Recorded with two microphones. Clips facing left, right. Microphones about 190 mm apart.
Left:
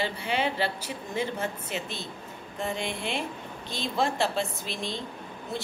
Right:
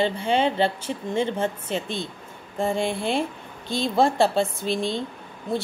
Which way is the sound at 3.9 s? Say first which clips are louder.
Right 7 dB; 30° right (ahead or behind).